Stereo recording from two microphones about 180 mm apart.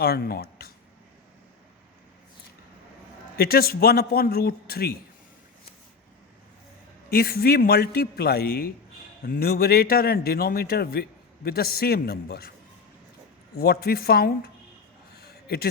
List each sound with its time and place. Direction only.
0.0 s a man's voice: 60° left (ahead or behind)
3.3 s a man's voice: 60° left (ahead or behind)
7.1 s a man's voice: 55° left (ahead or behind)
13.6 s a man's voice: 60° left (ahead or behind)
15.2 s a sound: 60° left (ahead or behind)